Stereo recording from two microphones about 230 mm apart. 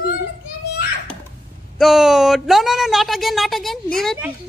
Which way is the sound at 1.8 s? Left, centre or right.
Centre.